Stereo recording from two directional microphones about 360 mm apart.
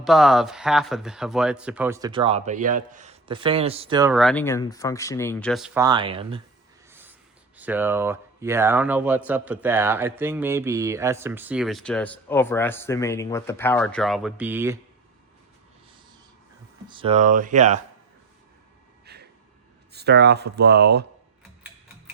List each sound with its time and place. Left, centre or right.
0.0 s speech: centre
6.9 s writing: centre
7.6 s speech: centre
16.9 s speech: centre
19.0 s gasp: right
19.9 s speech: right